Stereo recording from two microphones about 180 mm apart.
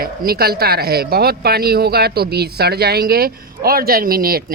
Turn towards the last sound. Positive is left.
turn(degrees=-55)  # may be behind; listen again after turning